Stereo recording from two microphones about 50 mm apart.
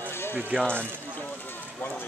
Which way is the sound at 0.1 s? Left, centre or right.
Left.